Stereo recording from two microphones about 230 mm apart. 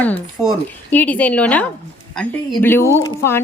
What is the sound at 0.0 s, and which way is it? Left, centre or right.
Speech, centre.